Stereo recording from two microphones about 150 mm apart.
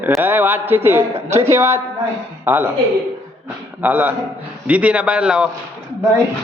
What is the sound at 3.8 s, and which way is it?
Speech, 10° right (ahead or behind).